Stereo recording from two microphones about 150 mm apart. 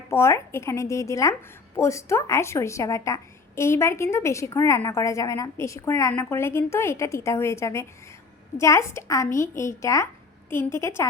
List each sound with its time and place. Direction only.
0.1 s a woman's voice: 20° left (ahead or behind)